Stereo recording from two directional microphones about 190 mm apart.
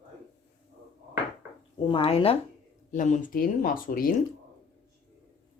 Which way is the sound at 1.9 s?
30° left (ahead or behind).